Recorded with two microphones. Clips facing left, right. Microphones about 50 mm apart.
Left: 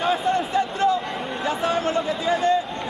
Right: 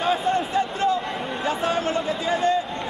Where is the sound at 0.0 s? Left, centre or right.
Centre.